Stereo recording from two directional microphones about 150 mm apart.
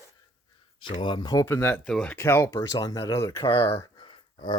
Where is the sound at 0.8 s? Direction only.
35° left (ahead or behind); by 2.1 s 5° left (ahead or behind).